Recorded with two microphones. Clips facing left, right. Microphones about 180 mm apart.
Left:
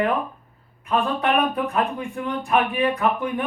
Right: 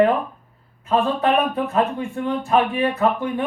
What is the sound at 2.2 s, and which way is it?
A man's voice, 30° right (ahead or behind).